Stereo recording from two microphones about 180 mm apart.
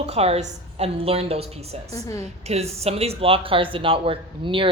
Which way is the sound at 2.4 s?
35° right (ahead or behind).